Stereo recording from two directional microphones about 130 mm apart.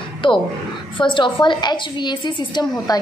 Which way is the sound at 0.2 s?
40° left (ahead or behind).